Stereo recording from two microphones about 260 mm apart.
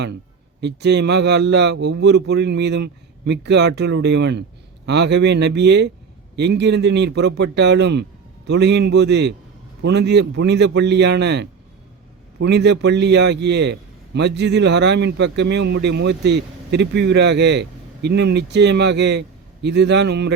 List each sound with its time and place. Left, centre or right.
0.6 s a man's voice: right